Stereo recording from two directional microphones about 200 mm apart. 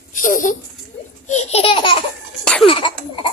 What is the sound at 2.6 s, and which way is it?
Cough, 25° left (ahead or behind).